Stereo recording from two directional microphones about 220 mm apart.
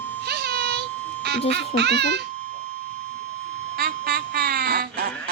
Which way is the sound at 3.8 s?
45° right (ahead or behind).